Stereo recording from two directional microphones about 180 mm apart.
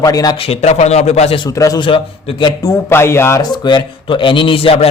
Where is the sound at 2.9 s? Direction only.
15° left (ahead or behind).